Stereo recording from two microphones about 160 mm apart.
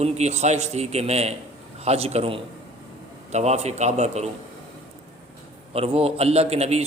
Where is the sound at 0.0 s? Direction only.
45° right (ahead or behind).